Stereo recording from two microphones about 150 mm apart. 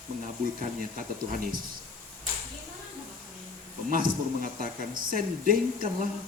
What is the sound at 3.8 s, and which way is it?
Speech, 65° right (ahead or behind).